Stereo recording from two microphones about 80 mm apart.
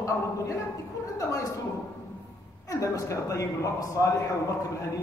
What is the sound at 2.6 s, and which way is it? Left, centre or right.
A man's voice, left.